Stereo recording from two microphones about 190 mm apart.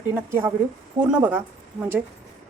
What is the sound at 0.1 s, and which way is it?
A woman's voice, 10° right (ahead or behind).